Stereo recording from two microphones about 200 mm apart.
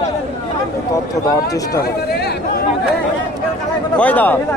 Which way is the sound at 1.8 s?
55° left (ahead or behind).